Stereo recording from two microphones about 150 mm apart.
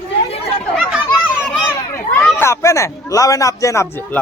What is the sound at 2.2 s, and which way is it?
A man's voice, 15° left (ahead or behind).